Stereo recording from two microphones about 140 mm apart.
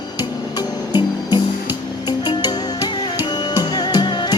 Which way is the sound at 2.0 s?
30° left (ahead or behind).